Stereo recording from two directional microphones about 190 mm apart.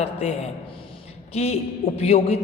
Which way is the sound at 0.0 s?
30° left (ahead or behind).